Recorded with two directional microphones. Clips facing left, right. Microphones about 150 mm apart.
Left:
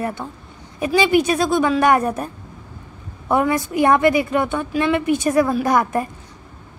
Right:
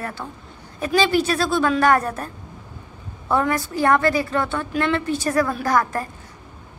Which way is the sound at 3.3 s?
15° left (ahead or behind).